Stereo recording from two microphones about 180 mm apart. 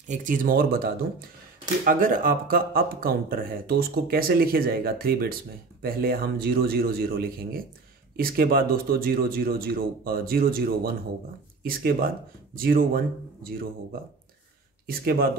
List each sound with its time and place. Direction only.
0.1 s speech: 45° right (ahead or behind)
14.9 s speech: 55° right (ahead or behind)